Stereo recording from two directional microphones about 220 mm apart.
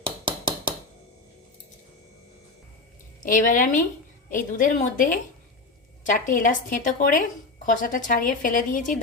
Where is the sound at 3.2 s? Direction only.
35° left (ahead or behind).